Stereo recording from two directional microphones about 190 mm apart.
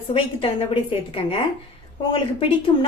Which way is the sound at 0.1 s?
30° left (ahead or behind).